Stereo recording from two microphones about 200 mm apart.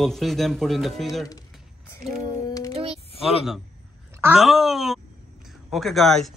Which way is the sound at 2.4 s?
20° left (ahead or behind).